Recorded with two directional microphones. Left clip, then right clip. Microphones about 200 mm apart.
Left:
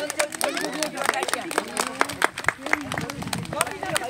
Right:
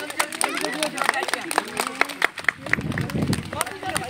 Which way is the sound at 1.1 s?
55° left (ahead or behind).